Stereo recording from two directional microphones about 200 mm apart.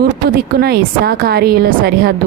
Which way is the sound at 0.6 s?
50° right (ahead or behind).